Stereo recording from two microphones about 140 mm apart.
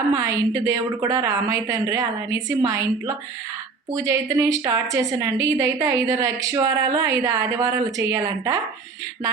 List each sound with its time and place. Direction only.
0.1 s a woman's voice: 25° right (ahead or behind)
3.9 s a woman's voice: 25° right (ahead or behind)